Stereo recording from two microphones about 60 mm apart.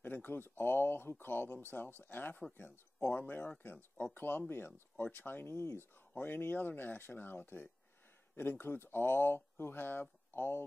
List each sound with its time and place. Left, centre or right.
0.0 s speech: left
6.1 s speech: left